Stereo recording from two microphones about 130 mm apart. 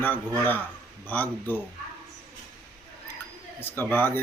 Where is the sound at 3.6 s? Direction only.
15° left (ahead or behind).